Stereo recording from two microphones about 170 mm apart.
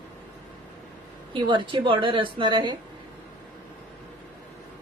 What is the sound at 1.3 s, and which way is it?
A woman's voice, 30° right (ahead or behind).